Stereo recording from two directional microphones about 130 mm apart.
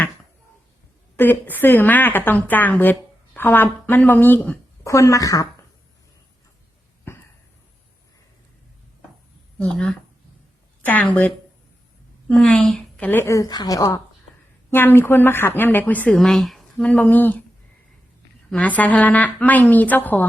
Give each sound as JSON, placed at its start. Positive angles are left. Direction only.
{"t": 1.1, "sound": "a woman's voice", "side_deg": 15}
{"t": 7.1, "sound": "a sound", "side_deg": 15}
{"t": 9.6, "sound": "a woman's voice", "side_deg": 10}
{"t": 12.3, "sound": "speech", "side_deg": 10}
{"t": 13.1, "sound": "speech", "side_deg": 20}
{"t": 14.7, "sound": "a woman's voice", "side_deg": 15}
{"t": 18.5, "sound": "a woman's voice", "side_deg": 10}